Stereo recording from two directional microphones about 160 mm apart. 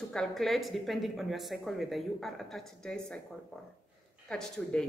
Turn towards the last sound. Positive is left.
turn(degrees=5)  # may be behind; listen again after turning